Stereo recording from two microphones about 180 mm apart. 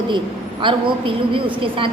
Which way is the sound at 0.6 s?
30° right (ahead or behind).